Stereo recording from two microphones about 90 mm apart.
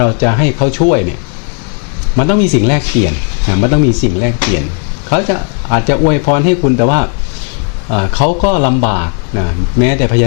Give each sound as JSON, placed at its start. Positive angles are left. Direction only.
{"t": 0.0, "sound": "speech", "side_deg": 20}
{"t": 2.1, "sound": "speech", "side_deg": 15}